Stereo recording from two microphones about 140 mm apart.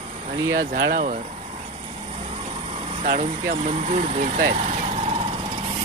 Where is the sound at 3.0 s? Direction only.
75° right (ahead or behind).